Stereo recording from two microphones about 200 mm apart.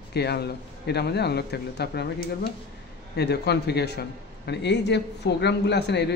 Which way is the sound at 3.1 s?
55° left (ahead or behind).